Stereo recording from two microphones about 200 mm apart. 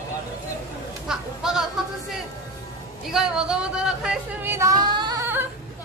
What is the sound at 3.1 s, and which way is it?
Speech, 5° right (ahead or behind).